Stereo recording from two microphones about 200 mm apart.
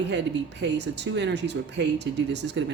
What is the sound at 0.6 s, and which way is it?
Speech, 60° right (ahead or behind).